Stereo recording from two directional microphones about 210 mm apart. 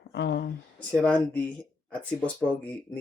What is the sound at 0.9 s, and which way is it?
Speech, 5° left (ahead or behind).